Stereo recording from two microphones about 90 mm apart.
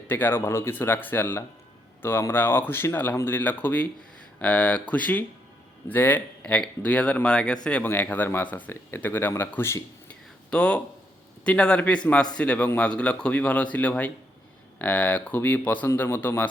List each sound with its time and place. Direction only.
0.1 s speech: 25° left (ahead or behind)
10.1 s a sound: 10° left (ahead or behind)
11.4 s speech: 10° left (ahead or behind)